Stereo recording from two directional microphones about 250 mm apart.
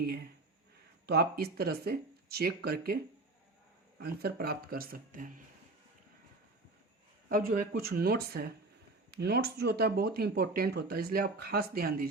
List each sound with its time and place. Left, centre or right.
0.0 s speech: right
7.3 s speech: right